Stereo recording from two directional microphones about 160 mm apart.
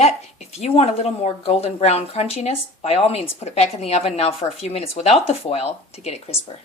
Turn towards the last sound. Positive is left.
turn(degrees=40)  # may be behind; listen again after turning